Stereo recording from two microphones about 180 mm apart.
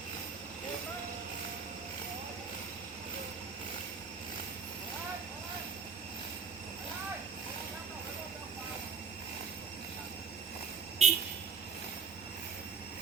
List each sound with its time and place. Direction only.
11.0 s vehicle: 40° right (ahead or behind)